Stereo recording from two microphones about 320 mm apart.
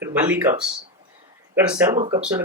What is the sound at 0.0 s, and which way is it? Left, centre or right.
Speech, centre.